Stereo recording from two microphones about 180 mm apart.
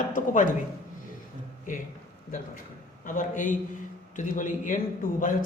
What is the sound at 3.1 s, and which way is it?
A man's voice, 50° left (ahead or behind).